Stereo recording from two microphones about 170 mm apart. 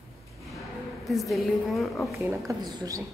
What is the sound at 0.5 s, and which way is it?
A woman's voice, centre (ahead or behind).